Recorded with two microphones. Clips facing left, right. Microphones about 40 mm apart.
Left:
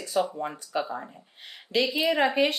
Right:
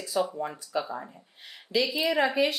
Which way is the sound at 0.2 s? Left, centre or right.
Left.